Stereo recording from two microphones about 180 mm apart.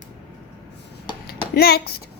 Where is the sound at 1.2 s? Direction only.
60° left (ahead or behind).